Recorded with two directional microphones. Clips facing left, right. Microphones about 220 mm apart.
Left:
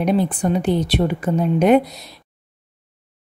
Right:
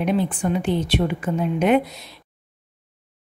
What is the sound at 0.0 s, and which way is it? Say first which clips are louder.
A woman's voice: left 3 dB; 40° left (ahead or behind).